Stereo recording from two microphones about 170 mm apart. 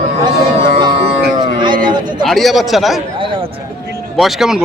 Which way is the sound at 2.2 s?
Centre (ahead or behind).